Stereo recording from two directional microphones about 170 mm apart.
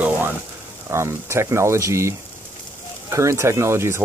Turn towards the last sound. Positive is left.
turn(degrees=-15)  # may be behind; listen again after turning